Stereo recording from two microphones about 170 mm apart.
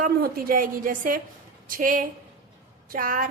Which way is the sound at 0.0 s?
55° right (ahead or behind).